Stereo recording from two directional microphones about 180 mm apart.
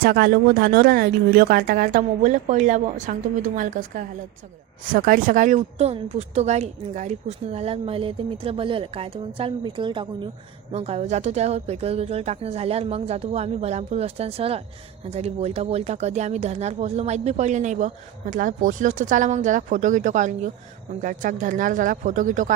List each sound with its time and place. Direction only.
0.0 s speech: 55° right (ahead or behind)